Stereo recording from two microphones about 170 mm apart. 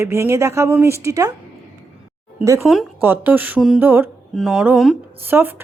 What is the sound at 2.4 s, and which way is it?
Speech, 20° right (ahead or behind).